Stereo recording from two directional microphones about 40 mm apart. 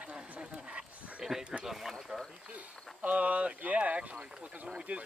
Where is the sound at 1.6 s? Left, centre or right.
Centre.